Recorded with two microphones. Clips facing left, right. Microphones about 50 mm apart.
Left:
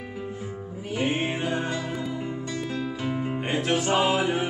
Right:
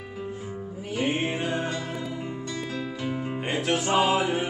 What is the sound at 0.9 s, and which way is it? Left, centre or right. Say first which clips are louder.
Music: even; centre.